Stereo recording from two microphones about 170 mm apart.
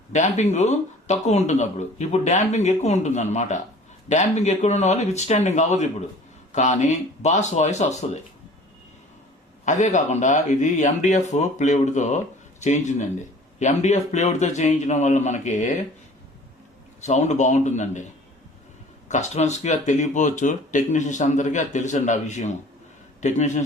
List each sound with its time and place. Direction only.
0.1 s speech: 45° left (ahead or behind)
9.6 s speech: 45° left (ahead or behind)
17.0 s speech: 40° left (ahead or behind)
19.0 s speech: 45° left (ahead or behind)